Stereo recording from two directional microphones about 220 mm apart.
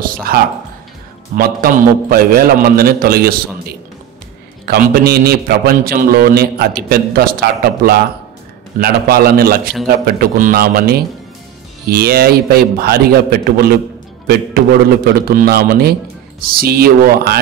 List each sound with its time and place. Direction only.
0.3 s a man's voice: 40° right (ahead or behind)